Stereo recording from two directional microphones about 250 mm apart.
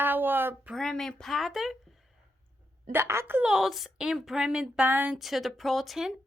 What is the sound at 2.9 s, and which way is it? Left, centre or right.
A woman's voice, centre.